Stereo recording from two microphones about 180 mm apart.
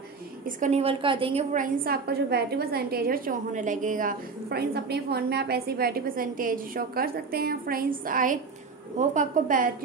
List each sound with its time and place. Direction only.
0.6 s a woman's voice: 40° right (ahead or behind)
1.5 s a woman's voice: 50° right (ahead or behind)